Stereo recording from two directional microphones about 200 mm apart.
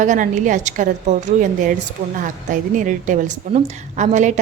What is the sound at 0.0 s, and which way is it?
A woman's voice, 40° right (ahead or behind).